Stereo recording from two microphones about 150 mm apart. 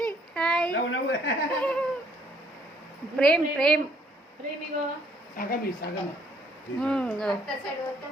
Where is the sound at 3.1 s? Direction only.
5° left (ahead or behind).